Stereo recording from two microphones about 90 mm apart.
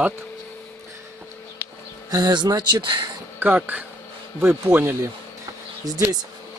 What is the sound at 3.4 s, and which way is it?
Speech, 20° right (ahead or behind).